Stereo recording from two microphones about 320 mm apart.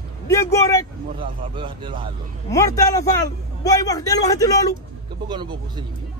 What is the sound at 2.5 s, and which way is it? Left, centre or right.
A man's voice, centre.